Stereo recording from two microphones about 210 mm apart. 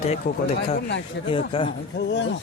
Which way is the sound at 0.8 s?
55° left (ahead or behind).